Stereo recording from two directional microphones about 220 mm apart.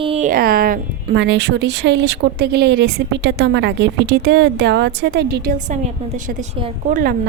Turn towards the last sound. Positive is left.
turn(degrees=-35)  # may be behind; listen again after turning